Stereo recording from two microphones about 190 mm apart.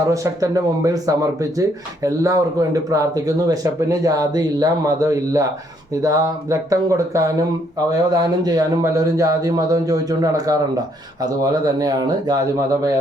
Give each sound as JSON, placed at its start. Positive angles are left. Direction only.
{"t": 0.1, "sound": "speech", "side_deg": -15}